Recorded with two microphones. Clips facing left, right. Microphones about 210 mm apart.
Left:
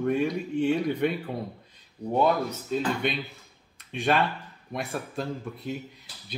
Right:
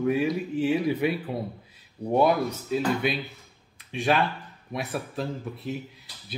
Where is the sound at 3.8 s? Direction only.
Centre (ahead or behind).